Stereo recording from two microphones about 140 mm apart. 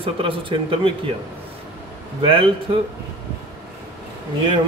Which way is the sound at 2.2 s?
40° right (ahead or behind).